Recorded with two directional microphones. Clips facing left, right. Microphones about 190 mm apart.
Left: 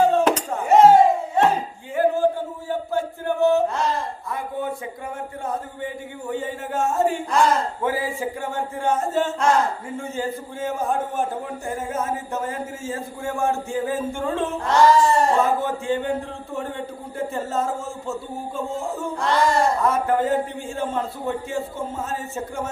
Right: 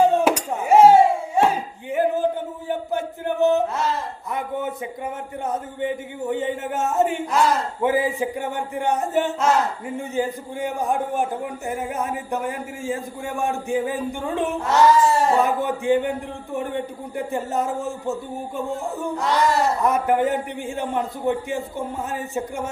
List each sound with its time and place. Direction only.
0.0 s a sound: 15° right (ahead or behind)
5.5 s speech: 20° right (ahead or behind)
7.3 s a man's voice: 5° right (ahead or behind)
7.8 s a man's voice: 20° right (ahead or behind)
14.7 s a man's voice: 5° right (ahead or behind)
15.4 s a man's voice: 15° right (ahead or behind)
19.8 s a man's voice: 15° right (ahead or behind)